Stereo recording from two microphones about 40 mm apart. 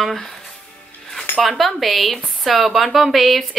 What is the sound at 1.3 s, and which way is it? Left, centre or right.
Cutlery, left.